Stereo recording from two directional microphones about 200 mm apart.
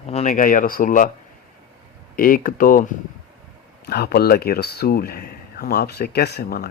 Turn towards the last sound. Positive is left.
turn(degrees=50)  # may be behind; listen again after turning